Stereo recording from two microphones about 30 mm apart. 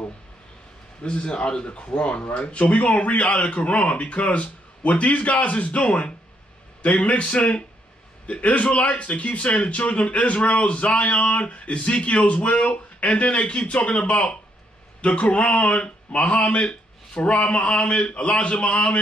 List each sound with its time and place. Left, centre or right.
1.0 s a man's voice: left